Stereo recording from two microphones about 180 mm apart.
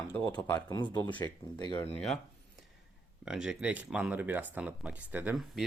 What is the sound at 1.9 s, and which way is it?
Speech, centre (ahead or behind).